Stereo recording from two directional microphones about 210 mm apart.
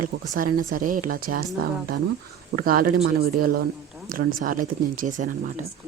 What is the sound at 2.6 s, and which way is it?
Speech, 45° right (ahead or behind).